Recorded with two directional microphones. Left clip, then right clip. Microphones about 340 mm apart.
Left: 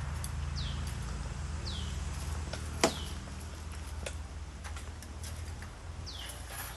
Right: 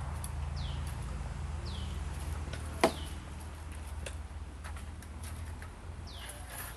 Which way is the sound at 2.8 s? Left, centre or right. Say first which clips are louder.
Right 1 dB; right.